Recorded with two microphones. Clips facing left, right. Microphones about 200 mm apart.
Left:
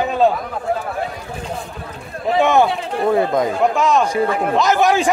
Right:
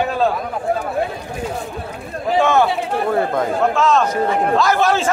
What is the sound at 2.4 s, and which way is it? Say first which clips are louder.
A man's voice: left 1 dB; 15° left (ahead or behind).